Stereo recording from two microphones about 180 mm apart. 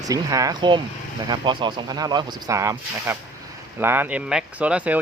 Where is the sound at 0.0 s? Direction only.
20° right (ahead or behind).